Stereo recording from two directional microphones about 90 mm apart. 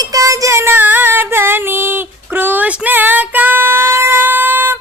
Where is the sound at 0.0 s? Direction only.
40° right (ahead or behind); by 4.8 s 25° right (ahead or behind).